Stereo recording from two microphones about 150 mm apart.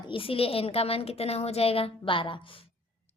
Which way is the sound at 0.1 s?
35° left (ahead or behind).